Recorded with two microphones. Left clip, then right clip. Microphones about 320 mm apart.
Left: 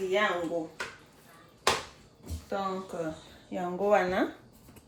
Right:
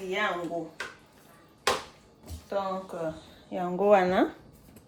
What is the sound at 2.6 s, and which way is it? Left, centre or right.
A woman's voice, centre.